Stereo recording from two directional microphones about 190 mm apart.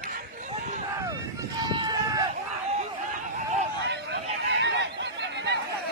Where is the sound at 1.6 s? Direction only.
20° right (ahead or behind).